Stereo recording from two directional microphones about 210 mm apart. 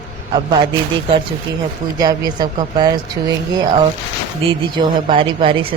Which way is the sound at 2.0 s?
20° right (ahead or behind).